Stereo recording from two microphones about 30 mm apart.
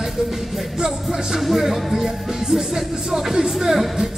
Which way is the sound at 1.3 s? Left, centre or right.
Centre.